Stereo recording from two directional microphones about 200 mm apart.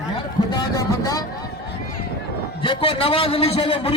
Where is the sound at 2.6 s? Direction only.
25° left (ahead or behind).